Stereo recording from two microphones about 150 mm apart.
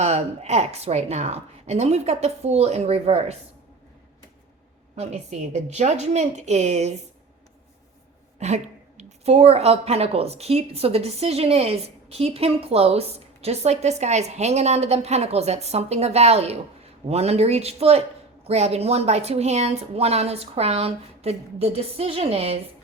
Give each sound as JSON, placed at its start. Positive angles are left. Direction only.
{"t": 0.0, "sound": "speech", "side_deg": -45}
{"t": 4.9, "sound": "speech", "side_deg": -50}
{"t": 8.4, "sound": "speech", "side_deg": -50}